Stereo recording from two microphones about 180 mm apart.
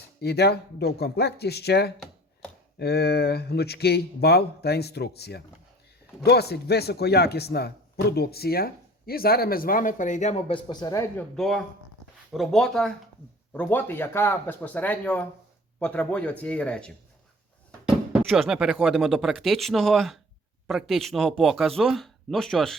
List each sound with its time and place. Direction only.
0.2 s speech: 65° left (ahead or behind); by 11.3 s 20° left (ahead or behind)
11.3 s speech: centre (ahead or behind)
18.2 s speech: centre (ahead or behind)